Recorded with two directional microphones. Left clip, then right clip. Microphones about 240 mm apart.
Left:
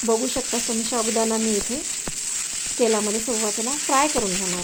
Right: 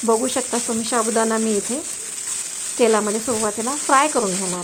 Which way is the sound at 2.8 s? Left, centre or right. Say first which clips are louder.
Right 4 dB; centre.